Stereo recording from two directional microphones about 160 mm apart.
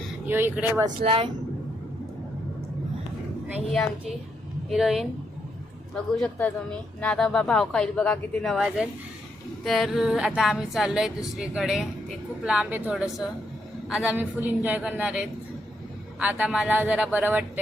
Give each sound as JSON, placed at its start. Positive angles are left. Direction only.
{"t": 0.3, "sound": "a man's voice", "side_deg": -15}
{"t": 1.0, "sound": "speech", "side_deg": -35}
{"t": 4.7, "sound": "a man's voice", "side_deg": 0}